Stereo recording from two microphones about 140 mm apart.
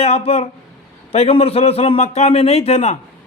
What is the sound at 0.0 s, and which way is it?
A man's voice, 50° left (ahead or behind).